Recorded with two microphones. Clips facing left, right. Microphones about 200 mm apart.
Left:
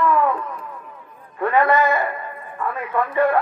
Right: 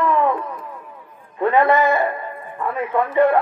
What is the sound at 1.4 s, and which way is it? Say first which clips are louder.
Speech: right 2 dB; 20° right (ahead or behind).